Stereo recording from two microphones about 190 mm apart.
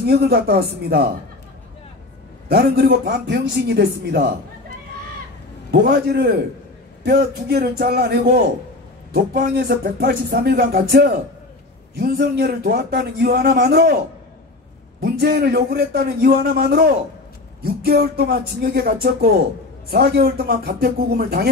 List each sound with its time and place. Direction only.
0.0 s speech: 55° right (ahead or behind)
2.4 s speech: 55° right (ahead or behind)
5.7 s speech: 55° right (ahead or behind)
15.0 s speech: 55° right (ahead or behind)